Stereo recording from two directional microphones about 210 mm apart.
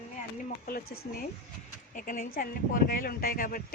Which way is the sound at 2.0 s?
40° left (ahead or behind).